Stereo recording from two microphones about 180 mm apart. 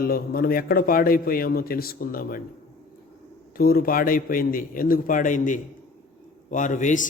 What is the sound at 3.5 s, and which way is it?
A man's voice, 55° left (ahead or behind).